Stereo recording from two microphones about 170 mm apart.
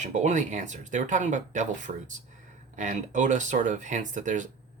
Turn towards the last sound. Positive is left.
turn(degrees=-50)  # may be behind; listen again after turning